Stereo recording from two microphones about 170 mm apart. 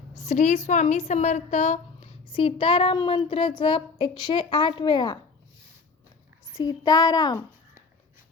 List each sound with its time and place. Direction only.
0.2 s a woman's voice: 45° left (ahead or behind); by 5.2 s 25° left (ahead or behind)
6.6 s speech: 20° left (ahead or behind)